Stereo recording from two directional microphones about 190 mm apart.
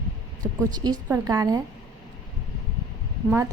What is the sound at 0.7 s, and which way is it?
Speech, 20° right (ahead or behind).